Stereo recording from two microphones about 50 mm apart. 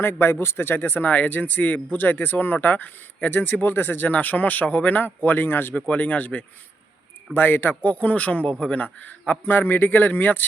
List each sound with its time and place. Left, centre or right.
0.0 s speech: left
5.9 s speech: left
7.3 s speech: left